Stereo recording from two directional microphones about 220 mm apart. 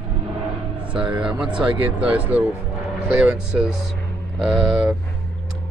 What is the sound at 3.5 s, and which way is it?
Speech, centre (ahead or behind).